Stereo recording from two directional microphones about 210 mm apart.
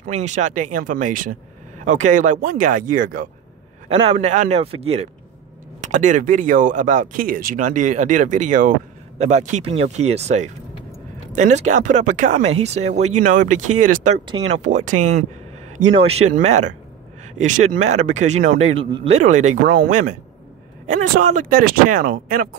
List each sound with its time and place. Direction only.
0.0 s speech: 35° right (ahead or behind)
3.9 s a man's voice: 30° right (ahead or behind)
18.8 s a man's voice: 25° right (ahead or behind)
19.1 s speech: 35° right (ahead or behind)